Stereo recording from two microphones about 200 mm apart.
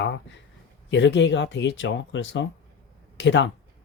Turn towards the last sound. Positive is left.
turn(degrees=65)  # may be behind; listen again after turning